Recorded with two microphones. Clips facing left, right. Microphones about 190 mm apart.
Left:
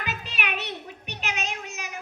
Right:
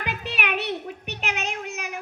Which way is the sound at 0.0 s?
60° right (ahead or behind).